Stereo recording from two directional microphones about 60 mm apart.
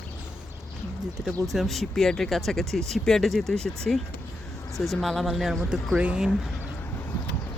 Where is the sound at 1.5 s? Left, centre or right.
Centre.